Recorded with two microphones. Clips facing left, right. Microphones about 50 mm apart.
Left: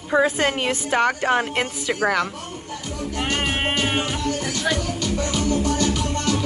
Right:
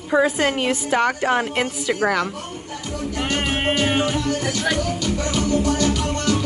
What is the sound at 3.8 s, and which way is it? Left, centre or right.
Music, centre.